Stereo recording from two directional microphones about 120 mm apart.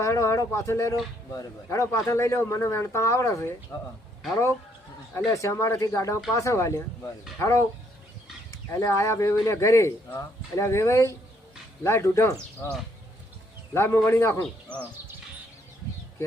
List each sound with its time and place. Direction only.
0.0 s speech: 25° left (ahead or behind)
5.1 s speech: 25° left (ahead or behind)
13.7 s speech: 20° left (ahead or behind)